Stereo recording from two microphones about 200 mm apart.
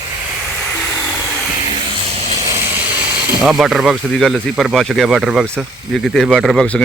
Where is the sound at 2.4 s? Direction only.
15° right (ahead or behind).